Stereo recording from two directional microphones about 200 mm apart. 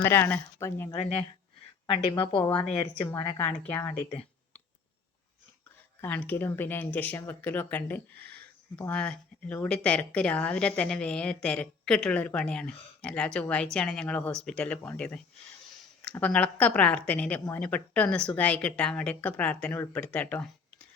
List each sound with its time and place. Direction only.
0.0 s speech: 10° left (ahead or behind)
1.9 s speech: 25° left (ahead or behind)
3.0 s speech: 20° left (ahead or behind)
6.0 s speech: 10° left (ahead or behind)